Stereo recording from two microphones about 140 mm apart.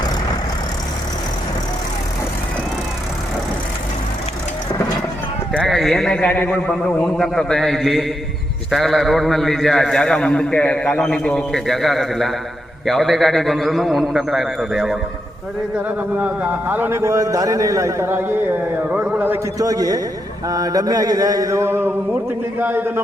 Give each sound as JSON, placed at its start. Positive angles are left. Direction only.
{"t": 5.5, "sound": "a man's voice", "side_deg": 0}
{"t": 16.1, "sound": "a man's voice", "side_deg": -10}
{"t": 19.5, "sound": "mantra", "side_deg": -25}
{"t": 22.5, "sound": "a man's voice", "side_deg": -15}